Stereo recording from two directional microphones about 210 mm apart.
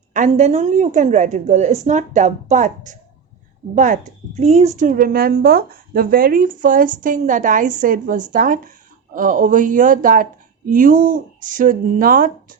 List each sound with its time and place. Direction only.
0.1 s speech: 35° right (ahead or behind)